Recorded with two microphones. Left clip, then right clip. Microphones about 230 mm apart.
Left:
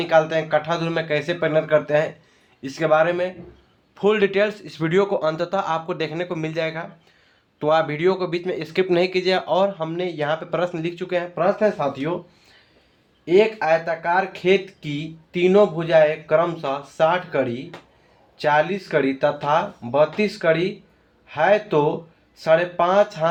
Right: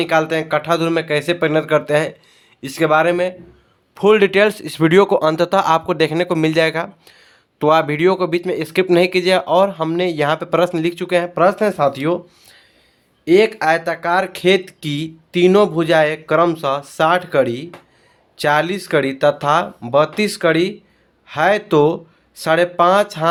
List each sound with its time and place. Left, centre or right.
0.0 s speech: right
13.2 s speech: right